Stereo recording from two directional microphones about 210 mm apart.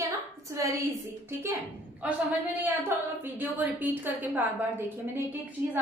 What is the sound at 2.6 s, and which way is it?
A woman's voice, 10° right (ahead or behind).